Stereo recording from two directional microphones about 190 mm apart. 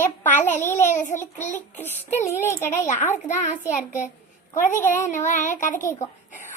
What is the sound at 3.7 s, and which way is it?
Speech, 40° left (ahead or behind).